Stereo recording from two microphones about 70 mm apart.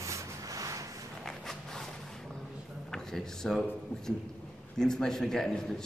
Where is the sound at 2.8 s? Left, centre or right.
Centre.